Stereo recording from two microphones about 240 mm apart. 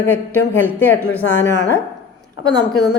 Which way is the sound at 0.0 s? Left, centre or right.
Centre.